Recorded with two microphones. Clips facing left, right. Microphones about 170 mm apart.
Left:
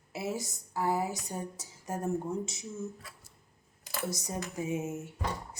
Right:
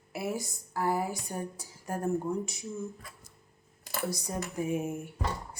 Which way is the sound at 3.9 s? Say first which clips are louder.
Right 2 dB; 50° right (ahead or behind).